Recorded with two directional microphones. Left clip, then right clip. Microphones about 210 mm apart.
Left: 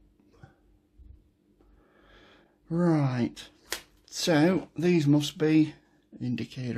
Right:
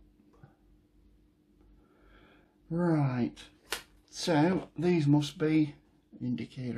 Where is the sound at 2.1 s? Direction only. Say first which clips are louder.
Left 5 dB; 55° left (ahead or behind).